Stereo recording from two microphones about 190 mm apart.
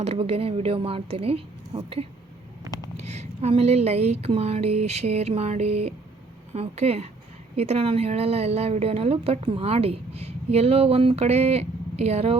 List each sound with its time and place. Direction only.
0.0 s a woman's voice: 30° right (ahead or behind)